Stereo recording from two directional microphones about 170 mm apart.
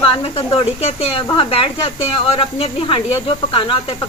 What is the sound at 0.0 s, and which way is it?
Speech, 35° left (ahead or behind).